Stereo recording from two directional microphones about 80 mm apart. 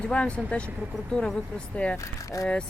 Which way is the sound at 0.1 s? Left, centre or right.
Centre.